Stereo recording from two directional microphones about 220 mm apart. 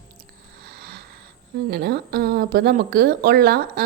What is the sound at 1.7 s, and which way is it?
A woman's voice, 45° right (ahead or behind).